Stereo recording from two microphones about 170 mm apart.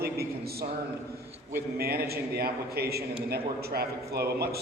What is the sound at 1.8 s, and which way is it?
A man's voice, 65° right (ahead or behind).